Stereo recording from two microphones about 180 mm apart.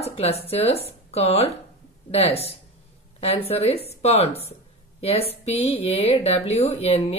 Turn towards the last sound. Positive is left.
turn(degrees=35)  # may be behind; listen again after turning